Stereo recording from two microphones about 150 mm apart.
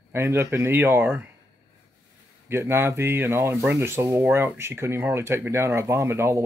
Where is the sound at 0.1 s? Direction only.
15° right (ahead or behind).